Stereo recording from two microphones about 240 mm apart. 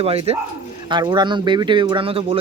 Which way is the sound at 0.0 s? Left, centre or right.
Right.